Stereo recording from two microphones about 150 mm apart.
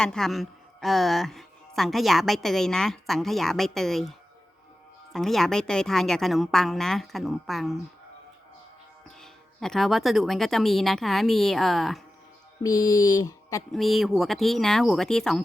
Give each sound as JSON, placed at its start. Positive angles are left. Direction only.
{"t": 0.0, "sound": "speech", "side_deg": 5}
{"t": 5.1, "sound": "speech", "side_deg": 0}
{"t": 9.2, "sound": "speech", "side_deg": 0}
{"t": 12.6, "sound": "a sound", "side_deg": 25}
{"t": 13.7, "sound": "speech", "side_deg": 0}